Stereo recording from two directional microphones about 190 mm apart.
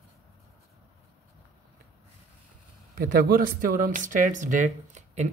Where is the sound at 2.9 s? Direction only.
50° right (ahead or behind).